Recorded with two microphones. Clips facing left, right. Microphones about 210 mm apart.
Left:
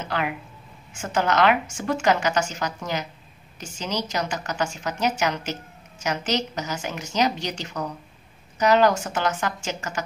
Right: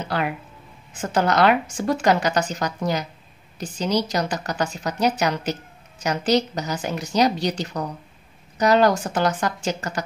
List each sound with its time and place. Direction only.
0.9 s a woman's voice: 35° right (ahead or behind)